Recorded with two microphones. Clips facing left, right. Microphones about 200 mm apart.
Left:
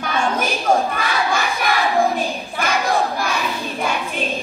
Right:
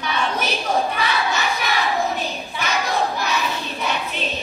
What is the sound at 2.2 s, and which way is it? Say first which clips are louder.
Child singing: left 4 dB; 50° left (ahead or behind).